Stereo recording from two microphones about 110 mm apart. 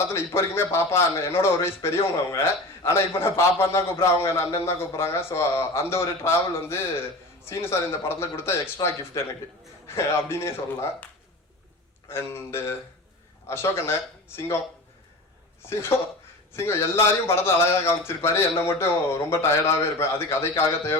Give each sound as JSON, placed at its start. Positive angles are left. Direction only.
{"t": 0.1, "sound": "a man's voice", "side_deg": 25}
{"t": 8.8, "sound": "speech", "side_deg": 35}
{"t": 9.2, "sound": "a man's voice", "side_deg": 25}
{"t": 15.6, "sound": "a man's voice", "side_deg": 25}